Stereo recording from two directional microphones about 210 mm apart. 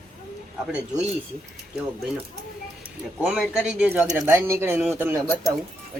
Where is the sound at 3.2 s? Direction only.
5° right (ahead or behind).